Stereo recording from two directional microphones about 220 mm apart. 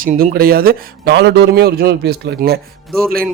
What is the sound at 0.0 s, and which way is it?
Speech, 35° right (ahead or behind).